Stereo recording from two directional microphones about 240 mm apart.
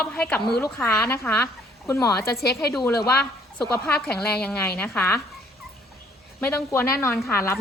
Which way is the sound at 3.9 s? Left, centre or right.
Centre.